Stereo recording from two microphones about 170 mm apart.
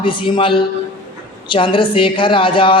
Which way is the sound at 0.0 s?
30° left (ahead or behind).